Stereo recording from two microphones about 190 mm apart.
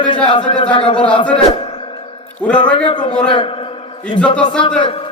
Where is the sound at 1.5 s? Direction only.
30° left (ahead or behind).